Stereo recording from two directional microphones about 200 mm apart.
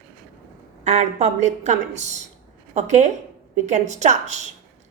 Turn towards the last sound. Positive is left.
turn(degrees=-35)  # may be behind; listen again after turning